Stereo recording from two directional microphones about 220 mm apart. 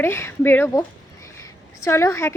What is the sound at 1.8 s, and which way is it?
Speech, 15° left (ahead or behind).